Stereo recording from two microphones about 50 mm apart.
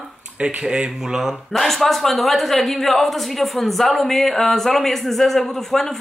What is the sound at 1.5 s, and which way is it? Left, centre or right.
A woman's voice, centre.